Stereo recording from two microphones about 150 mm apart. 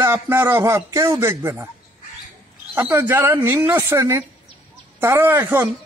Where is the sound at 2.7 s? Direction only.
15° right (ahead or behind).